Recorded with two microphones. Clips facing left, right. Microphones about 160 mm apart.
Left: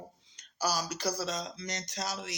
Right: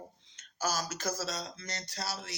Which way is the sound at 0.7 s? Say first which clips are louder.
Left 2 dB; 45° right (ahead or behind).